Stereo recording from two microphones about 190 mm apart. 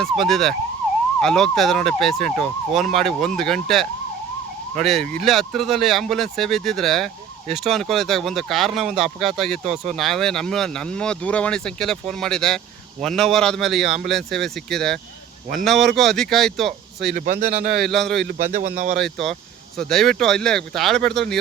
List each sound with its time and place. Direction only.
0.0 s speech: centre (ahead or behind)
17.1 s speech: 50° right (ahead or behind)
17.7 s speech: centre (ahead or behind)
18.3 s speech: 45° right (ahead or behind)
18.9 s speech: centre (ahead or behind)